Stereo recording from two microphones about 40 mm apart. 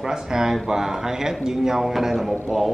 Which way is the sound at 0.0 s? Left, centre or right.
Centre.